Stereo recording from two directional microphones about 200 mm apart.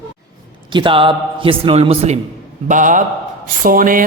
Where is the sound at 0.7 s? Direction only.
25° right (ahead or behind).